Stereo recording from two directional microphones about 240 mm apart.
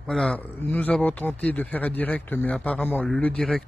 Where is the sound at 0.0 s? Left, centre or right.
Centre.